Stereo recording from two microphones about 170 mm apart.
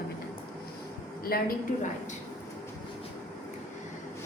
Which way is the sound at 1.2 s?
60° left (ahead or behind).